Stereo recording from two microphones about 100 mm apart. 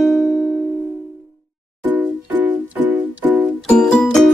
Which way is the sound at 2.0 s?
10° right (ahead or behind).